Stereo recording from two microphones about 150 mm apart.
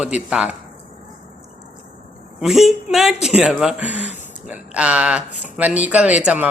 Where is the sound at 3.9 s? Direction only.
50° left (ahead or behind).